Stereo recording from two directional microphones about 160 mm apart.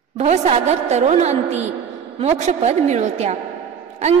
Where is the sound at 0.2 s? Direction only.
40° right (ahead or behind).